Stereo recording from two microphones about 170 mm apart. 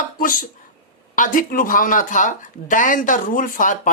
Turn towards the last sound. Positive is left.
turn(degrees=50)  # may be behind; listen again after turning